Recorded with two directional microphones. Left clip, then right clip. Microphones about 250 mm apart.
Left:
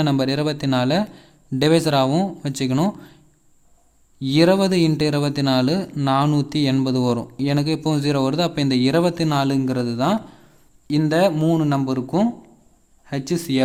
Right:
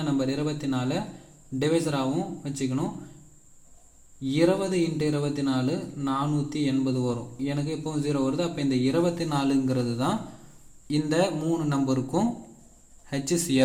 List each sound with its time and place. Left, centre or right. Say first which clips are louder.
0.0 s speech: left 7 dB; left
4.2 s a man's voice: left 7 dB; left